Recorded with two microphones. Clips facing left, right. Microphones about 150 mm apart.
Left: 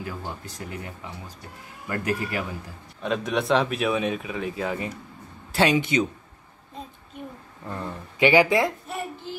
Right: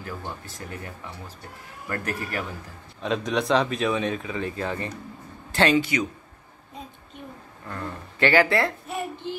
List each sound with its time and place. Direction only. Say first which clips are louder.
0.0 s speech: left 1 dB; 10° left (ahead or behind)
3.0 s a man's voice: even; centre (ahead or behind)
5.8 s a man's voice: left 1 dB; 25° left (ahead or behind)
7.6 s speech: left 1 dB; 15° left (ahead or behind)
8.8 s a sound: right 2 dB; centre (ahead or behind)